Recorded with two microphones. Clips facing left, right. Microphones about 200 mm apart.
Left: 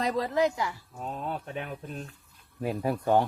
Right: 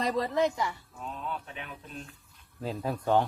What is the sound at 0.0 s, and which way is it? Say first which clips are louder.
Speech: left 1 dB; centre (ahead or behind).